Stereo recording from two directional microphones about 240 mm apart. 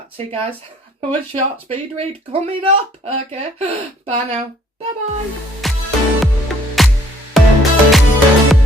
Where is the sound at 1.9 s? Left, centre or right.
Right.